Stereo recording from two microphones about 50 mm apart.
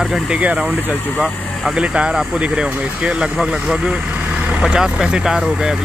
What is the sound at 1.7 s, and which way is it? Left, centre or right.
Speech, right.